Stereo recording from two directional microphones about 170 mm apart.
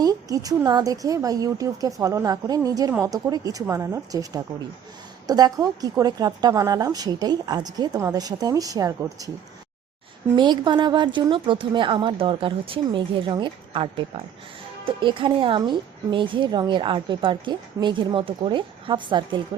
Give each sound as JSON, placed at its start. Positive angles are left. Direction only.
{"t": 0.0, "sound": "a woman's voice", "side_deg": -20}
{"t": 10.3, "sound": "a woman's voice", "side_deg": -25}